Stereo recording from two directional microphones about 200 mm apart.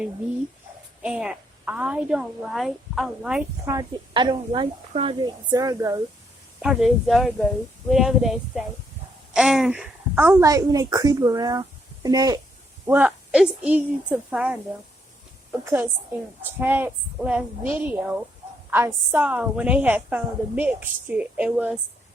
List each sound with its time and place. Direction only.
1.0 s a woman's voice: 5° right (ahead or behind)
3.7 s speech: 20° right (ahead or behind)
6.6 s a woman's voice: centre (ahead or behind); by 12.4 s 20° right (ahead or behind)
12.9 s a woman's voice: 5° right (ahead or behind)
15.6 s a woman's voice: 10° right (ahead or behind)